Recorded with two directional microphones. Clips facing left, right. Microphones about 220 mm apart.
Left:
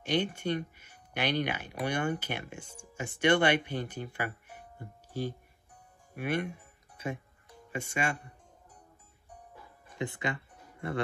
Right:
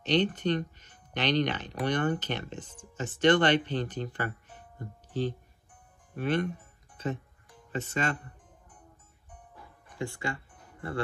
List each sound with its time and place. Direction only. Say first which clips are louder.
0.0 s speech: right 4 dB; 10° left (ahead or behind)
6.1 s music: right 3 dB; 10° left (ahead or behind)
7.7 s speech: right 2 dB; 10° left (ahead or behind)
9.8 s speech: even; 20° left (ahead or behind)